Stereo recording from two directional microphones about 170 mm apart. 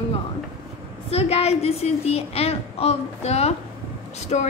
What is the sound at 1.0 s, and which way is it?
A woman's voice, 35° left (ahead or behind).